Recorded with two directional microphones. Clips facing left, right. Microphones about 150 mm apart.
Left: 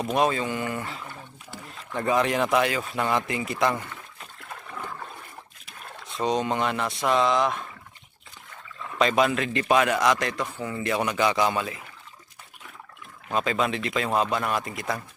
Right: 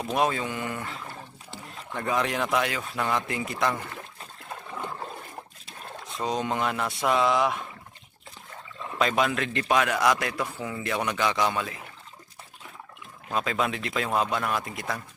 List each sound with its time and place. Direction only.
0.1 s a man's voice: centre (ahead or behind)
3.9 s a sound: 25° right (ahead or behind)
6.1 s a man's voice: centre (ahead or behind)
9.0 s a man's voice: centre (ahead or behind)
13.3 s a man's voice: centre (ahead or behind)